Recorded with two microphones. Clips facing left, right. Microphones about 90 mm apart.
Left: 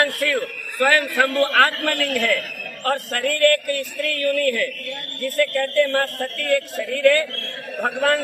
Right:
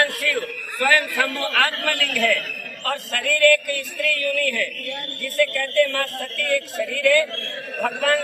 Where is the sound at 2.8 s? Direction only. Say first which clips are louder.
Left 3 dB; 45° left (ahead or behind).